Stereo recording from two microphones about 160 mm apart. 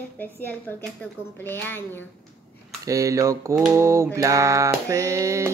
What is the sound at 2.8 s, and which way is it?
Mantra, 20° right (ahead or behind).